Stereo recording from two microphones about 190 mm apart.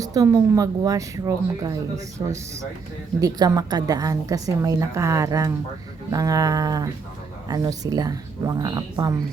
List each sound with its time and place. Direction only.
0.0 s speech: 20° right (ahead or behind)